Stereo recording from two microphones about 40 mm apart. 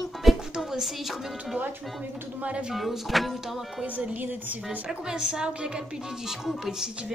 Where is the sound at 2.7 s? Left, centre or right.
Centre.